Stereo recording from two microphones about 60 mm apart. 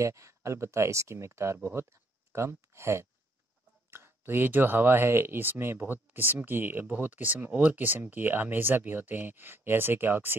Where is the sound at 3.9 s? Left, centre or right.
Right.